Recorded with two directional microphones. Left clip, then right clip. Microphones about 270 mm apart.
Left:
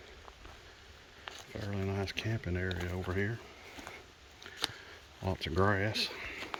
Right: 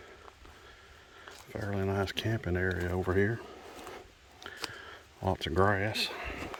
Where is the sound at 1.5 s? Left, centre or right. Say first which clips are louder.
Right 6 dB; centre.